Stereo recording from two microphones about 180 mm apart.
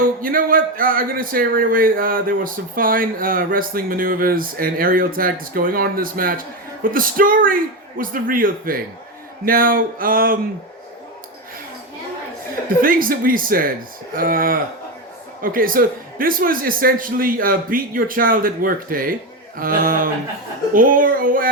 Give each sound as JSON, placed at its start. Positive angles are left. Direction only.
{"t": 0.0, "sound": "speech", "side_deg": -50}
{"t": 12.8, "sound": "speech", "side_deg": -50}